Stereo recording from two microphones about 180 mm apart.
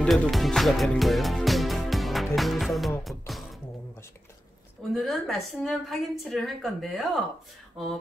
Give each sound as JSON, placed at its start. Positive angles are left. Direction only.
{"t": 0.0, "sound": "music", "side_deg": 0}
{"t": 4.9, "sound": "a woman's voice", "side_deg": 0}